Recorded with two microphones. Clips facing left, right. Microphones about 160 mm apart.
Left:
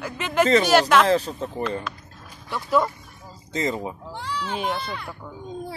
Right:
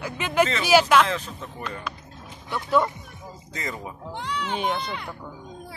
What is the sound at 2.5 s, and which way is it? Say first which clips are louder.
Speech: even; centre (ahead or behind).